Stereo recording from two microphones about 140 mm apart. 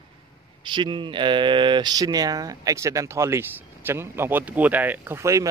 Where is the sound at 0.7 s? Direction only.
35° right (ahead or behind).